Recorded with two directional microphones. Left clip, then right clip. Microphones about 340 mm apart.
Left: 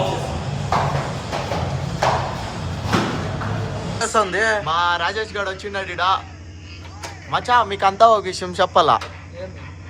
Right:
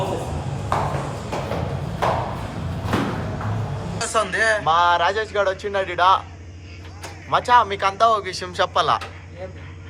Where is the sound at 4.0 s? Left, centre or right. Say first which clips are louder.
Left 3 dB; left.